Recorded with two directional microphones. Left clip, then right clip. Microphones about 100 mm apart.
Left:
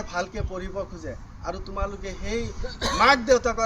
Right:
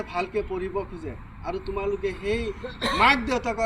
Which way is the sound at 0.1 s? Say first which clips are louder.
Right 3 dB; 40° left (ahead or behind).